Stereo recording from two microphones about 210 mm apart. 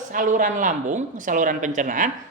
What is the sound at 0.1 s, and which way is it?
Speech, 40° right (ahead or behind).